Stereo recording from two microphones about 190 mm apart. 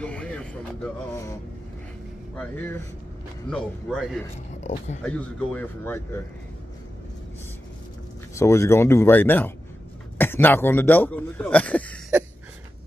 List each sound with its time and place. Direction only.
0.0 s a sound: 5° left (ahead or behind)
3.4 s a man's voice: 5° left (ahead or behind)
4.6 s speech: 40° left (ahead or behind)
5.0 s speech: 5° left (ahead or behind)
8.4 s speech: 15° left (ahead or behind)